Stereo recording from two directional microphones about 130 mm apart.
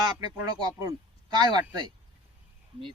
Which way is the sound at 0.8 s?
25° right (ahead or behind).